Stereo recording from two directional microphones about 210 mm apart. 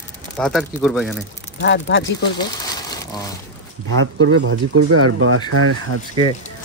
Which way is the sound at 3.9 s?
80° right.